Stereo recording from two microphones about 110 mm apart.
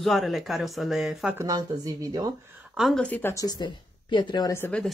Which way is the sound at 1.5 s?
35° right (ahead or behind).